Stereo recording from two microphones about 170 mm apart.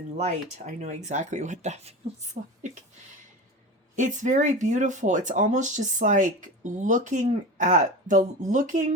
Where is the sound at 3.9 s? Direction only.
45° right (ahead or behind).